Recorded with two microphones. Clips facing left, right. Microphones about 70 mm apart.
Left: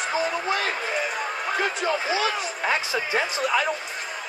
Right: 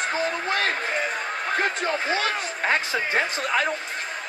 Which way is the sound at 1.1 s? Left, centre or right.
Centre.